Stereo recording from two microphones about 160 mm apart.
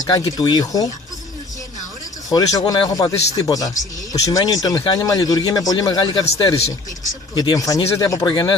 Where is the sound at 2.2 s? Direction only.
20° left (ahead or behind).